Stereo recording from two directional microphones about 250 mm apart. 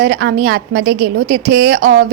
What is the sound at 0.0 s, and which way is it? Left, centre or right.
A woman's voice, right.